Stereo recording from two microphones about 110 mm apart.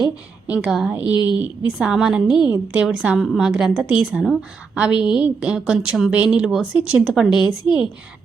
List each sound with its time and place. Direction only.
0.4 s a woman's voice: 10° right (ahead or behind)
1.0 s a woman's voice: 45° left (ahead or behind)
1.4 s a woman's voice: 10° right (ahead or behind)
2.3 s a woman's voice: 40° left (ahead or behind)
2.8 s a woman's voice: 5° right (ahead or behind)